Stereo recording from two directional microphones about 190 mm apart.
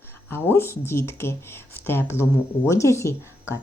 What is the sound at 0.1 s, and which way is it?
Speech, 10° left (ahead or behind).